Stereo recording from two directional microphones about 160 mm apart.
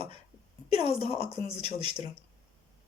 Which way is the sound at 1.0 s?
40° left (ahead or behind).